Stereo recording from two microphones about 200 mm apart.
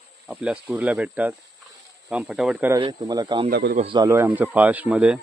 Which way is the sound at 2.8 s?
20° right (ahead or behind).